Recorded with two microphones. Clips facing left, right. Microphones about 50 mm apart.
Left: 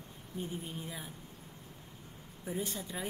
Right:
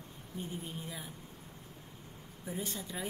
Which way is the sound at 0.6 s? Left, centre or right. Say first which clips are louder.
Even; centre.